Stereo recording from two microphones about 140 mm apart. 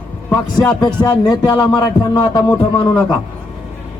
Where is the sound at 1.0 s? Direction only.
30° left (ahead or behind).